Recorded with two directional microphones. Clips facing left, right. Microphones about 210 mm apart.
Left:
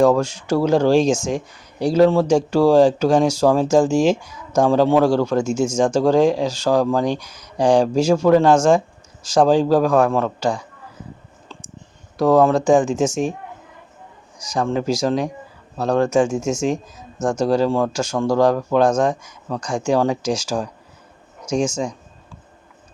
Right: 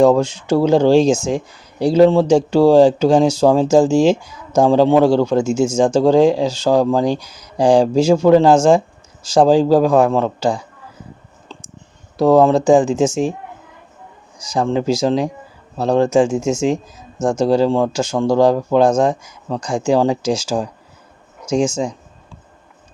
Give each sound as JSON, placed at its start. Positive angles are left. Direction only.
{"t": 0.0, "sound": "speech", "side_deg": -20}
{"t": 12.1, "sound": "speech", "side_deg": -25}
{"t": 14.5, "sound": "speech", "side_deg": -30}